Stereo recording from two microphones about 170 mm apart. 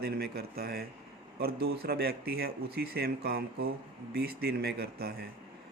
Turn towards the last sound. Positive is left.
turn(degrees=-65)  # may be behind; listen again after turning